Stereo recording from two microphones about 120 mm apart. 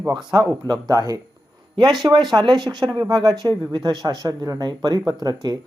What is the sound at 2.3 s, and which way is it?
Speech, 35° right (ahead or behind).